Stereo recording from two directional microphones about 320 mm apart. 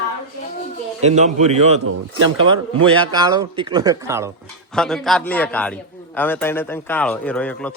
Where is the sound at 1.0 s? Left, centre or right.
Right.